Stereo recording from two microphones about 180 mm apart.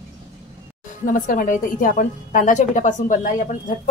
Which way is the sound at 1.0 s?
50° left (ahead or behind).